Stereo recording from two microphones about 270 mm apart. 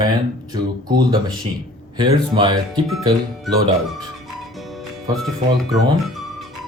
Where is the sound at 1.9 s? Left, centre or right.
Centre.